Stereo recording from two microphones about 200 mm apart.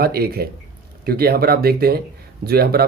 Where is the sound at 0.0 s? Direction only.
50° right (ahead or behind).